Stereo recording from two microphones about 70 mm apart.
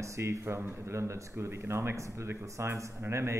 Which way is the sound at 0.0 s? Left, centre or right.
Right.